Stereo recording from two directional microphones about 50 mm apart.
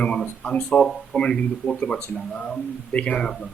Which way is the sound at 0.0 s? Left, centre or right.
Left.